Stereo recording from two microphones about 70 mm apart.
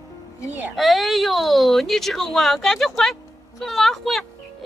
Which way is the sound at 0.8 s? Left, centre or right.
Centre.